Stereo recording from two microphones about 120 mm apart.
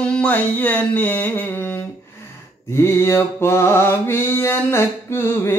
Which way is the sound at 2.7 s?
20° left (ahead or behind).